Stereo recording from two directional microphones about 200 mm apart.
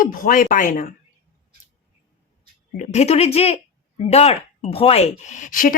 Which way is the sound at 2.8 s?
35° left (ahead or behind).